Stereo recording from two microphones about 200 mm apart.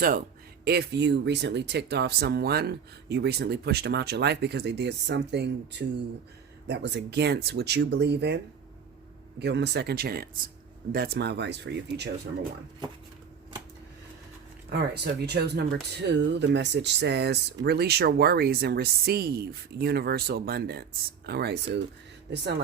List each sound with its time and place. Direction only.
0.6 s speech: 55° right (ahead or behind)
9.4 s speech: 60° right (ahead or behind)
14.7 s speech: 55° right (ahead or behind)